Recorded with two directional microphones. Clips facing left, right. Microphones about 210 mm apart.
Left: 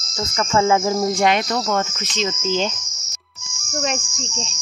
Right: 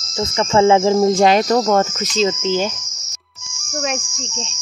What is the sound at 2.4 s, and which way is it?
Cricket, 10° right (ahead or behind).